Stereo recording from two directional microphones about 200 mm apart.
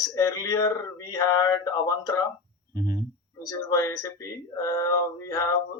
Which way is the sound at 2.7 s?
20° right (ahead or behind).